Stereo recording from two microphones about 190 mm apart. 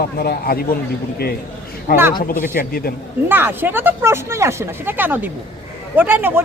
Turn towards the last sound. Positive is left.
turn(degrees=-10)  # may be behind; listen again after turning